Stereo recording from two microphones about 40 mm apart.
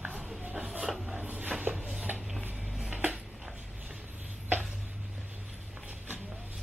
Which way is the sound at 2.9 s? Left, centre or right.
Right.